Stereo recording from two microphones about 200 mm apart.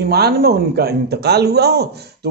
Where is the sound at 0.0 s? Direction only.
55° right (ahead or behind).